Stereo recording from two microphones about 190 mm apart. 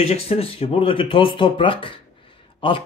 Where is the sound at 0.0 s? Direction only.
30° left (ahead or behind).